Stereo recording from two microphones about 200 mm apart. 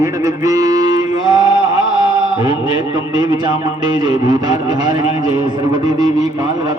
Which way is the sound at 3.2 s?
20° right (ahead or behind).